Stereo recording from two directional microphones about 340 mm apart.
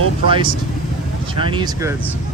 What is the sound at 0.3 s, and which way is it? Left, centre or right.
Speech, centre.